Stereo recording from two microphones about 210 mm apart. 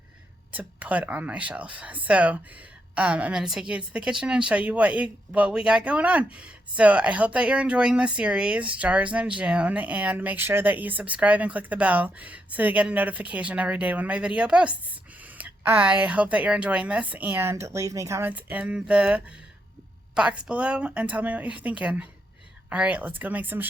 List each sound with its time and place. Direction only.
0.5 s a woman's voice: 5° right (ahead or behind)